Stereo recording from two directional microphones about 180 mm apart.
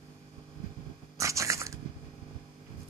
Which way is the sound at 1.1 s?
15° right (ahead or behind).